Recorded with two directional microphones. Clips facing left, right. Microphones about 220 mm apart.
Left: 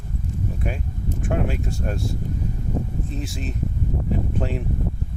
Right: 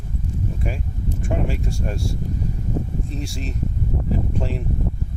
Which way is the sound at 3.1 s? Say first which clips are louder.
Even; centre (ahead or behind).